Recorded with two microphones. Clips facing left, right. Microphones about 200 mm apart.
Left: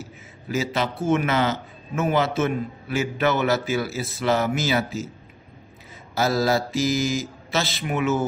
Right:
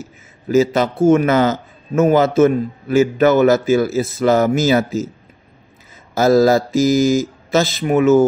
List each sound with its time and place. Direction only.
0.0 s a man's voice: 45° right (ahead or behind)
6.1 s a man's voice: 45° right (ahead or behind)